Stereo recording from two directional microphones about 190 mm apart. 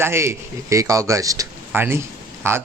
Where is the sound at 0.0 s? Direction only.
15° right (ahead or behind).